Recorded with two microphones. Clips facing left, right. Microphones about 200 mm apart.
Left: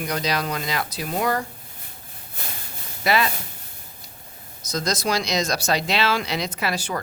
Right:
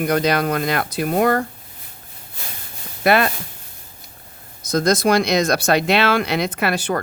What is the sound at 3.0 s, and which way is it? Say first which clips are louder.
Speech: right 5 dB; 55° right (ahead or behind).